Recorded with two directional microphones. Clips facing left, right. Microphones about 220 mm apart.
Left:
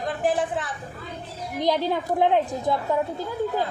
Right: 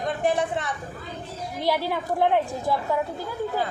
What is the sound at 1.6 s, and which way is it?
A woman's voice, 20° left (ahead or behind).